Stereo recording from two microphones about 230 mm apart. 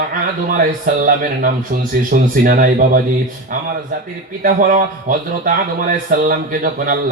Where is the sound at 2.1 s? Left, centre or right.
Right.